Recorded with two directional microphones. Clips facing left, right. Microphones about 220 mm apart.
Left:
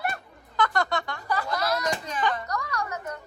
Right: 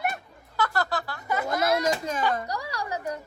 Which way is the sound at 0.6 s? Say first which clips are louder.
Left 1 dB; 5° right (ahead or behind).